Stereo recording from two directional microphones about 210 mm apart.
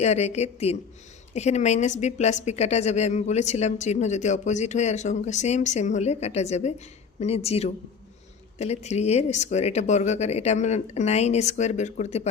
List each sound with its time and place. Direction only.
0.0 s a woman's voice: 30° left (ahead or behind)